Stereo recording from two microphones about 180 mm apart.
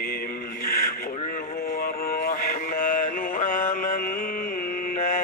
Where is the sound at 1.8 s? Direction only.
55° left (ahead or behind).